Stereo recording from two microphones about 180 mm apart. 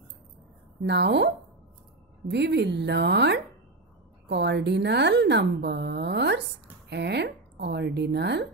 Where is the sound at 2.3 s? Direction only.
70° right (ahead or behind).